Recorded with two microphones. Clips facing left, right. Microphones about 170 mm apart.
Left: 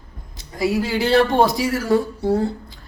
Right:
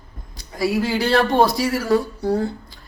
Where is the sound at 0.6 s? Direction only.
20° left (ahead or behind).